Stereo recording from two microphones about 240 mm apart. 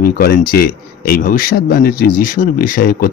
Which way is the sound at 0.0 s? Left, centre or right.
Left.